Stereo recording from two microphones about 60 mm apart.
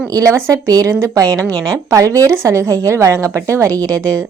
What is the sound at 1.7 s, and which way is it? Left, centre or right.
Speech, right.